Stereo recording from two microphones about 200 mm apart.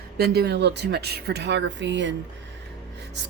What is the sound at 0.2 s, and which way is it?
Speech, 55° right (ahead or behind).